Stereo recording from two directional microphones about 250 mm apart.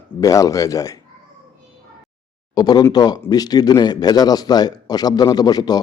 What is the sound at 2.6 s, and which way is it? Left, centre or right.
A man's voice, centre.